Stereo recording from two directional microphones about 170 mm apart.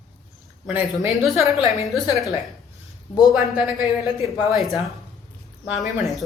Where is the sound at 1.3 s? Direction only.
Centre (ahead or behind).